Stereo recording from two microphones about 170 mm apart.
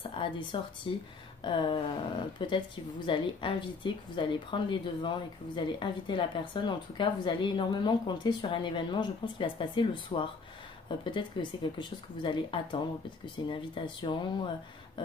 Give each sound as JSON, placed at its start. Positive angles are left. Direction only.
{"t": 0.1, "sound": "a woman's voice", "side_deg": 30}